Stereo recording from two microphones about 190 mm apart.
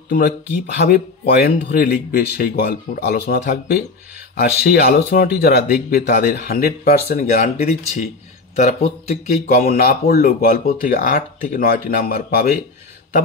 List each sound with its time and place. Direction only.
0.8 s speech: 45° left (ahead or behind)
7.2 s speech: 40° left (ahead or behind)